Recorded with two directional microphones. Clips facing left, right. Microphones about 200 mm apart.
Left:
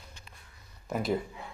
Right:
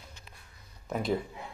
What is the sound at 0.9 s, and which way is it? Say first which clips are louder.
Speech: even; 5° left (ahead or behind).